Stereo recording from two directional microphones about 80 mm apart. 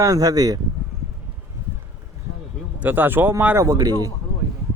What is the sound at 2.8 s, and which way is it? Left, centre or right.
Speech, right.